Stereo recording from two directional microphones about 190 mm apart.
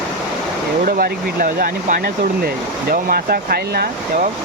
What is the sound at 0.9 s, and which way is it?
Speech, 50° right (ahead or behind).